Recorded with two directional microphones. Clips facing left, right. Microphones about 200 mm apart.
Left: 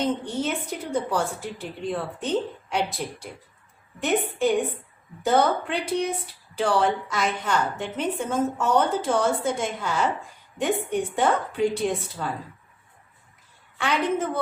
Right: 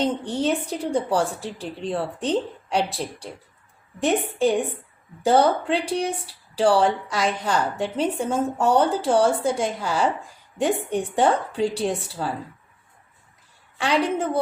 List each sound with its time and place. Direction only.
0.0 s a woman's voice: 35° right (ahead or behind)
13.7 s a woman's voice: 35° right (ahead or behind)